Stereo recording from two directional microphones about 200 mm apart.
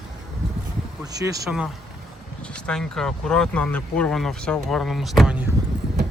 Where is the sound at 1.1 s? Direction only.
15° right (ahead or behind).